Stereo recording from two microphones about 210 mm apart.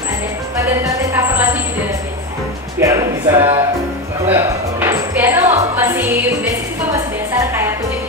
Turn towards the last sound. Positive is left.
turn(degrees=-15)  # may be behind; listen again after turning